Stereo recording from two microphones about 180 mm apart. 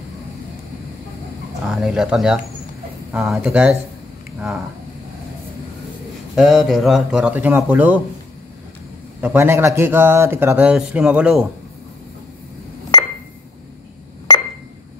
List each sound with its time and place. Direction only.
1.7 s speech: 5° right (ahead or behind)
6.3 s speech: centre (ahead or behind)
9.2 s speech: 10° right (ahead or behind)